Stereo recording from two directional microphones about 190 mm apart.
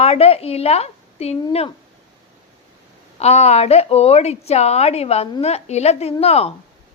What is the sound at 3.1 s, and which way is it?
A woman's voice, 35° left (ahead or behind).